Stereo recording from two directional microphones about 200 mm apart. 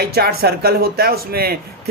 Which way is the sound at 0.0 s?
50° right (ahead or behind).